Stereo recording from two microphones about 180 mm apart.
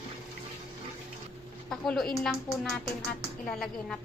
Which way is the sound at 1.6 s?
Centre (ahead or behind).